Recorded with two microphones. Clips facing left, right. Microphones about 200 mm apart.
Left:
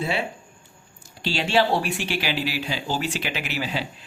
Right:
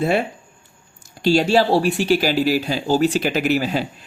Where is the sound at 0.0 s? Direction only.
50° right (ahead or behind).